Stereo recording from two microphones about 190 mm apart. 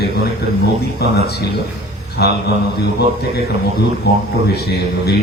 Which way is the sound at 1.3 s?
60° left (ahead or behind).